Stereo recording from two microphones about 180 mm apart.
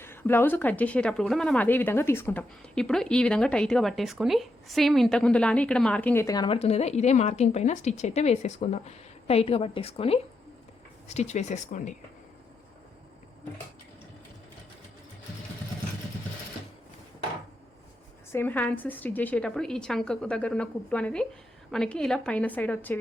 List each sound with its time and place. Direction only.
0.0 s speech: 10° left (ahead or behind); by 11.9 s 40° left (ahead or behind)
18.3 s speech: 10° left (ahead or behind)